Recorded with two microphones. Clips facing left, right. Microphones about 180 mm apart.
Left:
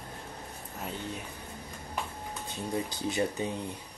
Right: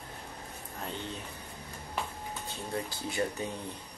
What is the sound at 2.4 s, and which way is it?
Speech, 20° left (ahead or behind).